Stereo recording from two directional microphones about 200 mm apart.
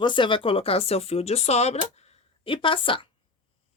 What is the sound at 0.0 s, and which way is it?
Speech, 25° left (ahead or behind).